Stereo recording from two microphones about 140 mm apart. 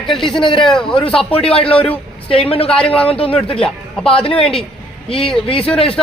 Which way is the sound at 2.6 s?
5° left (ahead or behind).